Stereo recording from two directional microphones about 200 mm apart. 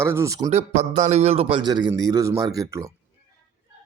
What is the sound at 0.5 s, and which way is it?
A man's voice, 35° right (ahead or behind).